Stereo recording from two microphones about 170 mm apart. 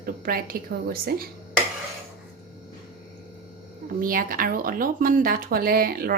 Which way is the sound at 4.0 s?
55° right (ahead or behind).